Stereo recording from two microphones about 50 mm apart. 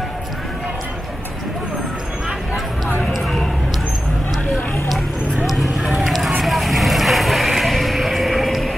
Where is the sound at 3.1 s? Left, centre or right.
Centre.